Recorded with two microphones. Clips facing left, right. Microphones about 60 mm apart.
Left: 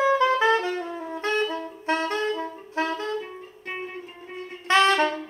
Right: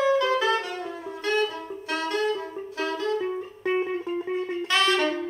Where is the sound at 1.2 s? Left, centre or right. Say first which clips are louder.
Even; left.